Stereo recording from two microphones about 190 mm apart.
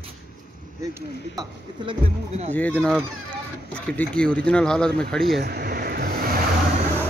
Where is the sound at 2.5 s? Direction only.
10° left (ahead or behind).